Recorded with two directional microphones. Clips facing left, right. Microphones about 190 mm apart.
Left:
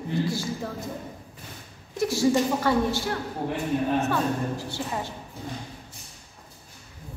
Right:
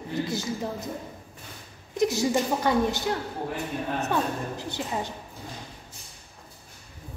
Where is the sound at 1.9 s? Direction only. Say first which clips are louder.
Left 1 dB; 20° right (ahead or behind).